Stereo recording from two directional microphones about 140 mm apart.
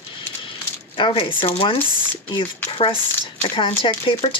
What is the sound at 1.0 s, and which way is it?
Speech, 35° left (ahead or behind).